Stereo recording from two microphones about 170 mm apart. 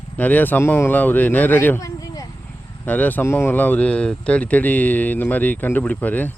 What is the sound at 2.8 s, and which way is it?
Speech, 10° left (ahead or behind).